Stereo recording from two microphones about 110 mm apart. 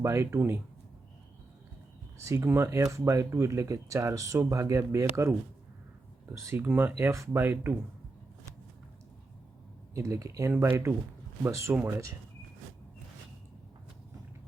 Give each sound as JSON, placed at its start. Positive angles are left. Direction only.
{"t": 0.0, "sound": "speech", "side_deg": -25}
{"t": 2.2, "sound": "speech", "side_deg": -25}
{"t": 6.3, "sound": "speech", "side_deg": -25}
{"t": 9.9, "sound": "speech", "side_deg": -30}